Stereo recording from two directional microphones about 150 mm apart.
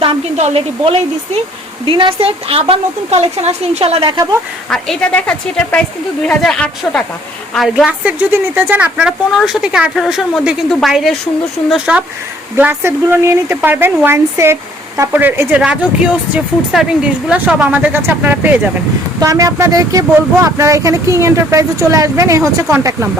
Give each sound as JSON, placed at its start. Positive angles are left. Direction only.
{"t": 0.0, "sound": "a woman's voice", "side_deg": -40}
{"t": 4.7, "sound": "a woman's voice", "side_deg": 5}
{"t": 17.2, "sound": "speech", "side_deg": -10}